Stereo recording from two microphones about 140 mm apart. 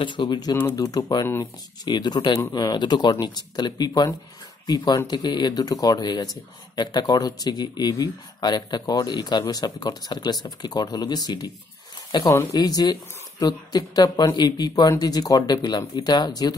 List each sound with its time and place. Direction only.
0.0 s speech: 35° left (ahead or behind)